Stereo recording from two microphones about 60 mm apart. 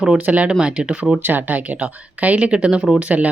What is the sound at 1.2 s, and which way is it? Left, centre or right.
Speech, right.